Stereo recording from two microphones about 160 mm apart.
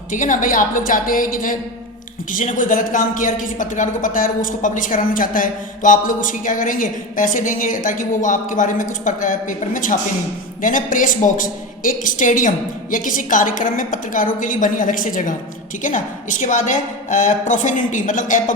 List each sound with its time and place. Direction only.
0.1 s a woman's voice: 55° left (ahead or behind)